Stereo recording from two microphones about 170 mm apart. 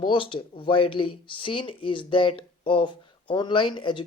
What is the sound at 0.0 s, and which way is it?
Speech, 30° left (ahead or behind).